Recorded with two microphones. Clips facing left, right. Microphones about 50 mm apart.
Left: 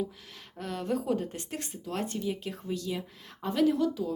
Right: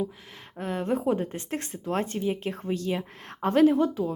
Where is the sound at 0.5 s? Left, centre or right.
Right.